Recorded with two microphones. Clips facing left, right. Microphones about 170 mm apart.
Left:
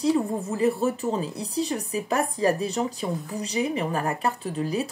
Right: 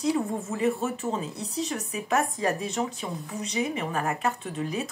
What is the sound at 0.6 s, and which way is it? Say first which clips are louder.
A woman's voice: left 4 dB; 35° left (ahead or behind).